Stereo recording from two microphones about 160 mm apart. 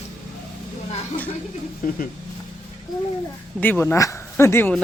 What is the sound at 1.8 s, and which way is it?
Speech, 60° left (ahead or behind).